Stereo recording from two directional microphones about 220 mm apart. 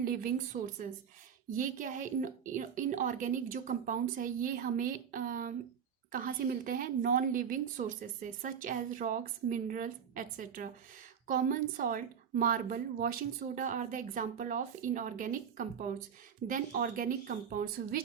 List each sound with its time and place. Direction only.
0.0 s a woman's voice: 40° right (ahead or behind)